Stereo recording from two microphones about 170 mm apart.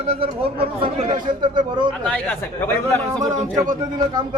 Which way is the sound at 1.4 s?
25° right (ahead or behind).